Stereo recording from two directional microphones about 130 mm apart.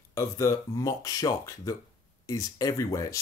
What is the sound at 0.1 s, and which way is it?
Speech, 25° left (ahead or behind).